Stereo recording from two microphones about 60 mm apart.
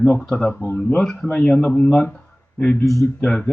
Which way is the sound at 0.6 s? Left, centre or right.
Left.